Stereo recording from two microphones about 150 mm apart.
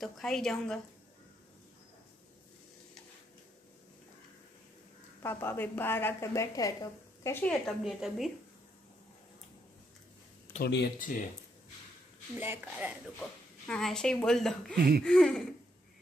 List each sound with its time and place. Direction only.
0.0 s speech: 5° left (ahead or behind)
5.2 s a woman's voice: 15° left (ahead or behind)
7.8 s speech: centre (ahead or behind)
10.6 s speech: 75° left (ahead or behind)
12.4 s a woman's voice: 10° right (ahead or behind)
13.2 s speech: 5° left (ahead or behind)
14.8 s speech: 90° right
15.0 s speech: 5° left (ahead or behind)